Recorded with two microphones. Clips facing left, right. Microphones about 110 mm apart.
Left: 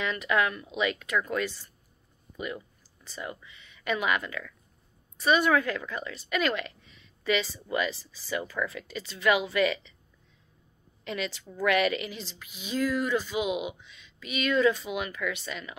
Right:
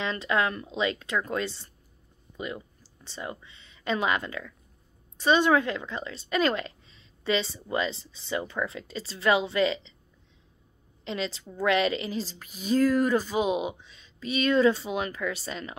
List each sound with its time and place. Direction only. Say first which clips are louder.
0.0 s a woman's voice: even; 30° right (ahead or behind)
11.1 s a woman's voice: right 2 dB; 30° right (ahead or behind)